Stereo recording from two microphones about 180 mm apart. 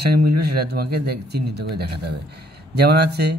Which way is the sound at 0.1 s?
60° right (ahead or behind).